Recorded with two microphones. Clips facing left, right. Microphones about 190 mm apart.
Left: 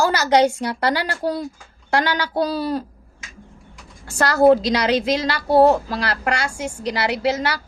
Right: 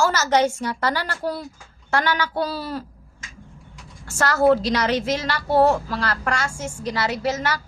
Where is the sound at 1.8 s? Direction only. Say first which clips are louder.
Left 2 dB; 15° left (ahead or behind).